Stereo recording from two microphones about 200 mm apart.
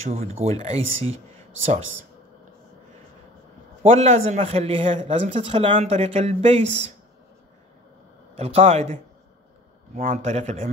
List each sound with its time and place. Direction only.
0.0 s speech: 30° right (ahead or behind)
3.8 s a man's voice: 30° right (ahead or behind)
8.4 s speech: 30° right (ahead or behind)